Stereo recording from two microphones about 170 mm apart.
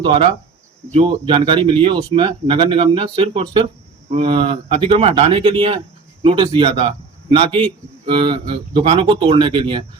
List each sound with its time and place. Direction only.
0.0 s a man's voice: 30° right (ahead or behind)